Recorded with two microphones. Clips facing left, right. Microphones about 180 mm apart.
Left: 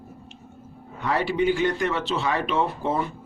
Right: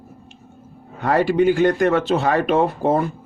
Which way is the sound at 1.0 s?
45° right (ahead or behind).